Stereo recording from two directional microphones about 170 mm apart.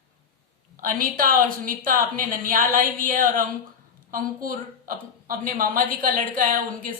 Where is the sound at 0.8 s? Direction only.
55° right (ahead or behind).